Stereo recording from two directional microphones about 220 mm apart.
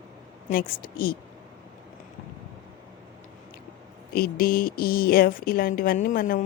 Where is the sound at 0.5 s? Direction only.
40° left (ahead or behind).